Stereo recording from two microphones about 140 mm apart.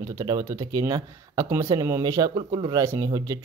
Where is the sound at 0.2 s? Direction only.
25° right (ahead or behind).